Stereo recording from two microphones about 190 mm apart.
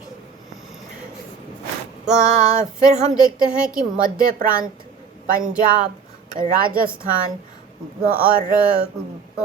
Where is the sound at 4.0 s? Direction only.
50° right (ahead or behind).